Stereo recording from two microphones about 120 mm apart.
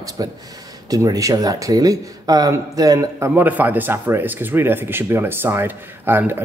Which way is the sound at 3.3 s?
15° right (ahead or behind).